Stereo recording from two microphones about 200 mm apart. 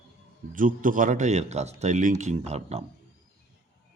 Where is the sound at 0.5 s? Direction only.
40° right (ahead or behind).